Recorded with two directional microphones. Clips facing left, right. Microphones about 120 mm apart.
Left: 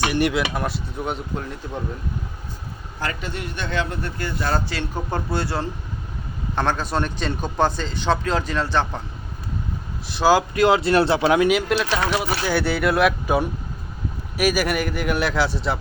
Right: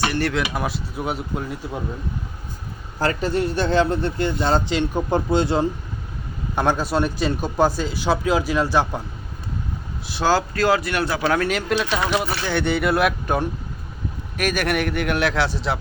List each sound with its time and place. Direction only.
0.0 s speech: 15° left (ahead or behind)
0.3 s speech: centre (ahead or behind)
3.0 s a man's voice: 35° right (ahead or behind); by 5.6 s 20° right (ahead or behind)
6.6 s speech: 5° right (ahead or behind)
10.2 s speech: 15° left (ahead or behind)
11.3 s speech: 10° left (ahead or behind)